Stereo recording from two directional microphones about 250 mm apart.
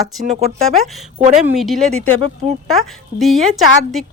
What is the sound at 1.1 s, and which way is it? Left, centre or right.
Speech, right.